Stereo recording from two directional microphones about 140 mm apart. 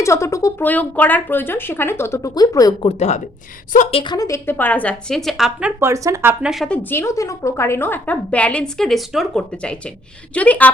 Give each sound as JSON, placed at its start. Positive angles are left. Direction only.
{"t": 0.0, "sound": "a woman's voice", "side_deg": 20}
{"t": 2.8, "sound": "a woman's voice", "side_deg": 45}
{"t": 3.9, "sound": "a woman's voice", "side_deg": 30}
{"t": 5.9, "sound": "speech", "side_deg": -20}
{"t": 6.4, "sound": "a woman's voice", "side_deg": 0}
{"t": 6.7, "sound": "a woman's voice", "side_deg": 15}